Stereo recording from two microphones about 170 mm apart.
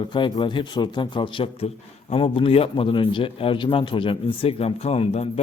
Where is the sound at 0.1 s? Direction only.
30° left (ahead or behind).